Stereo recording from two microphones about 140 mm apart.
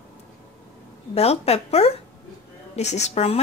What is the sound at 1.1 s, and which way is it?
Speech, 45° left (ahead or behind).